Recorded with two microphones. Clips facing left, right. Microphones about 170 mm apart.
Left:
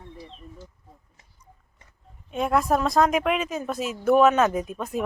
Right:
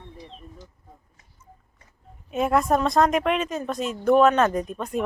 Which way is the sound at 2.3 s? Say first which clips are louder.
Right 1 dB; centre (ahead or behind).